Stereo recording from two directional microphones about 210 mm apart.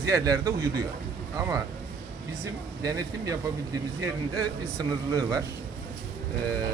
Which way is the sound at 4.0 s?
20° right (ahead or behind).